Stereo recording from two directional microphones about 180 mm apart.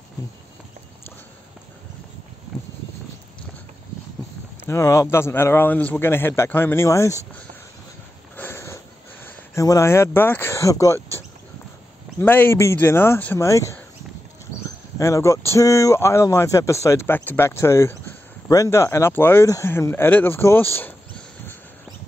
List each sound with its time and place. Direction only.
4.6 s speech: 15° left (ahead or behind)
8.4 s a sound: 15° left (ahead or behind)
12.2 s speech: 10° left (ahead or behind)
15.0 s speech: 15° left (ahead or behind)